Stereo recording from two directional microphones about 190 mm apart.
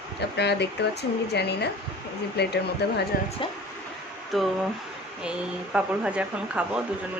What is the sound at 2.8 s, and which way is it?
Speech, 60° left (ahead or behind).